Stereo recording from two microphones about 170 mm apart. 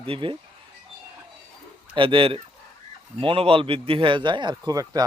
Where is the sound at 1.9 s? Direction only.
30° right (ahead or behind).